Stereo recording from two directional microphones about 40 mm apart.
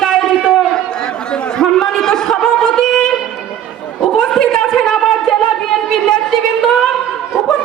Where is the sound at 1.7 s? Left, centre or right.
Centre.